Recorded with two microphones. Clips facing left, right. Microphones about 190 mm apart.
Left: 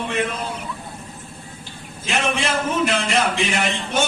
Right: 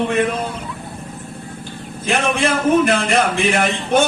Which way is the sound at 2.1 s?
55° right (ahead or behind).